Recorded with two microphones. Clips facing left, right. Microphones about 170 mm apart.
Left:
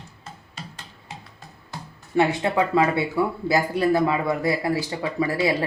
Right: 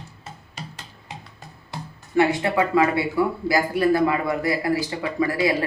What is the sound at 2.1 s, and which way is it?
Speech, 25° left (ahead or behind).